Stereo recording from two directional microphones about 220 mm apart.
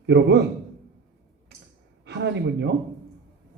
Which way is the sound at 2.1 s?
50° right (ahead or behind).